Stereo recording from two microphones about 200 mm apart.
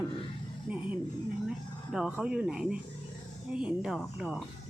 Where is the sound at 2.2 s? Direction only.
5° right (ahead or behind).